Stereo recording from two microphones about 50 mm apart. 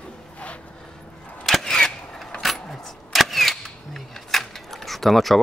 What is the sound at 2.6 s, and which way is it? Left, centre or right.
Camera, centre.